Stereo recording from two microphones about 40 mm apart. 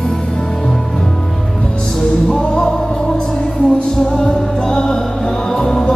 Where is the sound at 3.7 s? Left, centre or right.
Centre.